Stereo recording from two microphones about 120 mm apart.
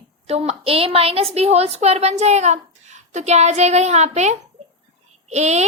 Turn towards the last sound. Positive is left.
turn(degrees=-70)  # may be behind; listen again after turning